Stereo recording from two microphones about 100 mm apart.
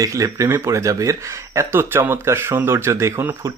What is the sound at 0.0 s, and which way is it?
Speech, 35° right (ahead or behind).